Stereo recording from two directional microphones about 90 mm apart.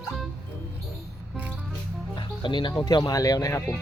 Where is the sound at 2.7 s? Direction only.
45° left (ahead or behind).